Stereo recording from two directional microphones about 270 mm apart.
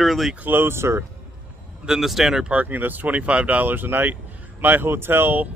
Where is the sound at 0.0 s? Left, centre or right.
Centre.